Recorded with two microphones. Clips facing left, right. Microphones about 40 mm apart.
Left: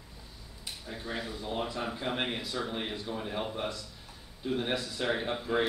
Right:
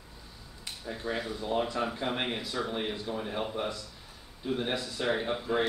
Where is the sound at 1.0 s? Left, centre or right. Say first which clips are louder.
Right 4 dB; centre.